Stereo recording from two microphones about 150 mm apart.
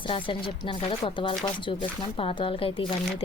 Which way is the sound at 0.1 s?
35° left (ahead or behind).